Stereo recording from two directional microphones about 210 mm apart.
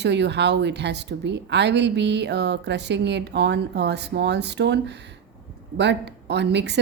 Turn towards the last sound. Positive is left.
turn(degrees=-55)  # may be behind; listen again after turning